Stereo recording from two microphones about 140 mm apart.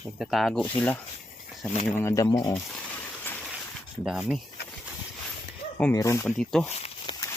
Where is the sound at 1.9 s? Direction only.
20° left (ahead or behind).